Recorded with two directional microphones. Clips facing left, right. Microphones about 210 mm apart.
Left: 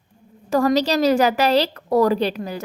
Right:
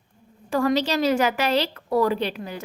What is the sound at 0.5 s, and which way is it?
A woman's voice, 40° left (ahead or behind).